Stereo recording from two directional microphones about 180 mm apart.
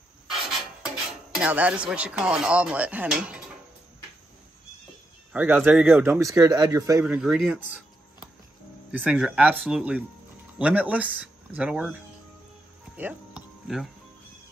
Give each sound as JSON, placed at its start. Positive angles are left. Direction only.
{"t": 0.3, "sound": "music", "side_deg": 0}
{"t": 5.3, "sound": "a man's voice", "side_deg": -10}
{"t": 8.9, "sound": "a man's voice", "side_deg": -10}
{"t": 12.9, "sound": "music", "side_deg": -5}